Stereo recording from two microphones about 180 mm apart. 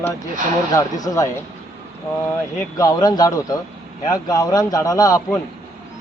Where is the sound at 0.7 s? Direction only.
20° left (ahead or behind).